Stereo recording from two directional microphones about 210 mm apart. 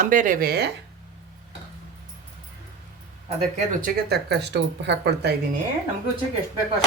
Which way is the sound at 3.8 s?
50° right (ahead or behind).